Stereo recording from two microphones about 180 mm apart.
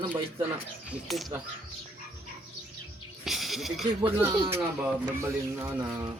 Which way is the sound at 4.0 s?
15° right (ahead or behind).